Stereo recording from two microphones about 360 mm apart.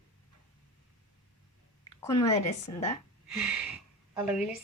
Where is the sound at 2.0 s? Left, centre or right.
Centre.